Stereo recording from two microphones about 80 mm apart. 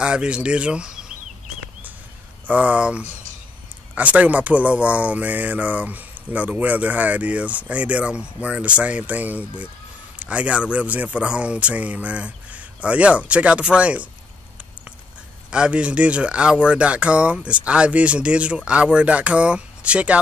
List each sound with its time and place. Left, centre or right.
0.0 s a man's voice: centre
2.4 s speech: centre
15.5 s speech: centre